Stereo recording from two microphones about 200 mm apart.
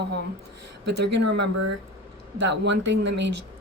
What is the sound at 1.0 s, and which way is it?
Speech, 60° right (ahead or behind).